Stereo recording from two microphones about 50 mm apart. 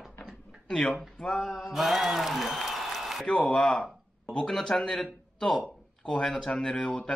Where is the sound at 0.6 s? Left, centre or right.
Centre.